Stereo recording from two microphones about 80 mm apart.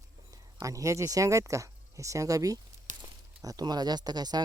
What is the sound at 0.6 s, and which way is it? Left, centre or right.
Speech, right.